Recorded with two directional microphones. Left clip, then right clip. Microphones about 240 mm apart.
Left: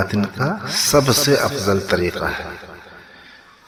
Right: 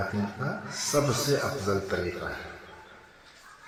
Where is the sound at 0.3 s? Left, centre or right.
Left.